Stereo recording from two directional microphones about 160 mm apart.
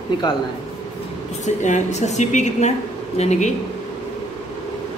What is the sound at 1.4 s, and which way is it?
A woman's voice, 50° left (ahead or behind).